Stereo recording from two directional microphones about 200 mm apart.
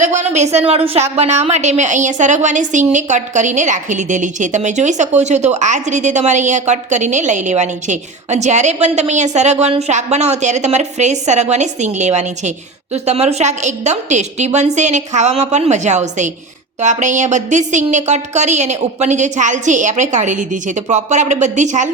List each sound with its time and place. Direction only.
0.0 s a woman's voice: 35° right (ahead or behind)